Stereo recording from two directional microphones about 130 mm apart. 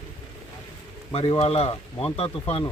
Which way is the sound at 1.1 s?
45° left (ahead or behind).